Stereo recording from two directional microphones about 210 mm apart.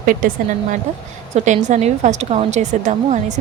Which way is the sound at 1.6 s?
35° right (ahead or behind).